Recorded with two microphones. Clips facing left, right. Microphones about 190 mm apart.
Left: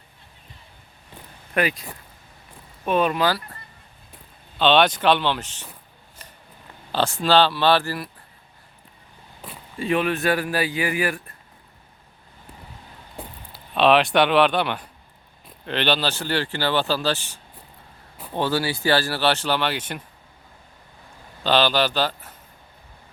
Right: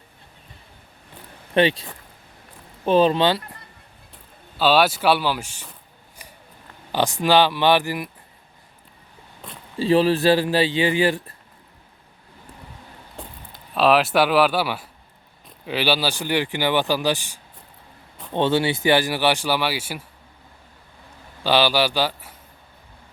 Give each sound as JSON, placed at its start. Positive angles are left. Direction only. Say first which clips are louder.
{"t": 1.5, "sound": "speech", "louder": "right 5 dB", "side_deg": -30}
{"t": 4.5, "sound": "speech", "louder": "even", "side_deg": -5}
{"t": 6.2, "sound": "a sound", "louder": "right 2 dB", "side_deg": -10}
{"t": 6.9, "sound": "speech", "louder": "right 1 dB", "side_deg": -15}
{"t": 9.7, "sound": "speech", "louder": "right 5 dB", "side_deg": -30}
{"t": 13.1, "sound": "speech", "louder": "left 1 dB", "side_deg": 0}
{"t": 18.3, "sound": "speech", "louder": "right 4 dB", "side_deg": -25}
{"t": 21.4, "sound": "speech", "louder": "right 1 dB", "side_deg": -10}